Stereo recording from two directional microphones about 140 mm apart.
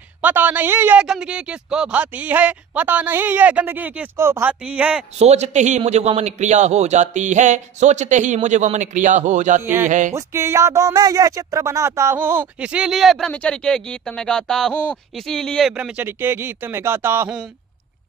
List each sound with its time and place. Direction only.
0.2 s speech: 15° right (ahead or behind)
1.0 s speech: 5° right (ahead or behind)
5.2 s a man's voice: 50° right (ahead or behind)
9.6 s speech: 15° right (ahead or behind)
9.8 s a man's voice: 65° right (ahead or behind)
10.1 s speech: 20° right (ahead or behind); by 15.7 s 5° left (ahead or behind)
15.7 s speech: 10° right (ahead or behind)